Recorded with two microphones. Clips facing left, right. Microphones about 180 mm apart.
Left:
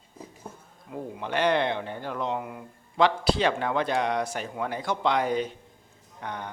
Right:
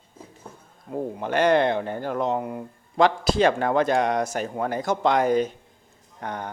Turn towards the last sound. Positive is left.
turn(degrees=-45)  # may be behind; listen again after turning